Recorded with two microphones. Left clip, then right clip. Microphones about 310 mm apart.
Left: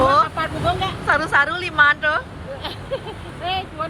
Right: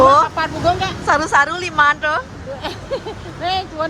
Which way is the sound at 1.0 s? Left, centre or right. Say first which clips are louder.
Right 3 dB; centre.